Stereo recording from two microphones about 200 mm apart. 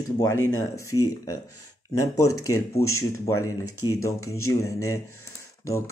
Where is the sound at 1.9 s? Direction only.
15° left (ahead or behind).